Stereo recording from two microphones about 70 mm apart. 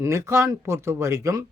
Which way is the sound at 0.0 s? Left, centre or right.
Right.